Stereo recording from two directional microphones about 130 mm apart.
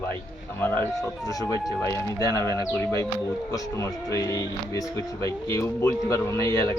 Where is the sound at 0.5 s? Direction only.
15° left (ahead or behind).